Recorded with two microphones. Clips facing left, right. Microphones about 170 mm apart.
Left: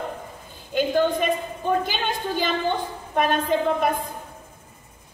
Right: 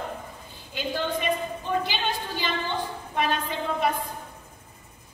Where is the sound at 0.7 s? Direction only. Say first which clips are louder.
Left 8 dB; 50° left (ahead or behind).